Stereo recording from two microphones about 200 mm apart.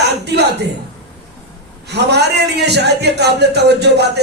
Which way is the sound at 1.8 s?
55° right (ahead or behind).